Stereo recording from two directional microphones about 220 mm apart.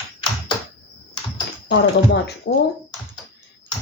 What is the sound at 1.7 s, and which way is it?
Speech, 50° left (ahead or behind).